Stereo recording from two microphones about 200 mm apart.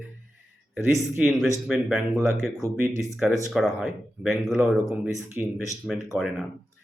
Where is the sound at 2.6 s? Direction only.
15° right (ahead or behind).